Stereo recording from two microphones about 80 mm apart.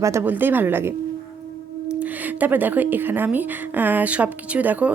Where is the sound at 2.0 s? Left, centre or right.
Centre.